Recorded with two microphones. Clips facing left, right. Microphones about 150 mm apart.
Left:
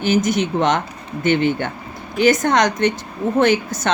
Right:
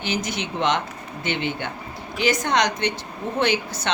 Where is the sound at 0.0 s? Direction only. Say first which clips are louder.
Left 10 dB; 50° left (ahead or behind).